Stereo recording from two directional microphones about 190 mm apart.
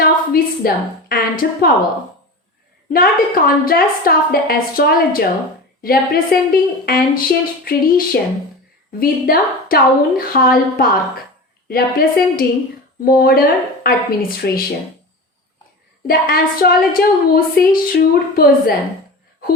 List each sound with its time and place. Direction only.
0.0 s a sound: 50° left (ahead or behind)
2.9 s a woman's voice: 50° left (ahead or behind)
16.0 s a woman's voice: 50° left (ahead or behind)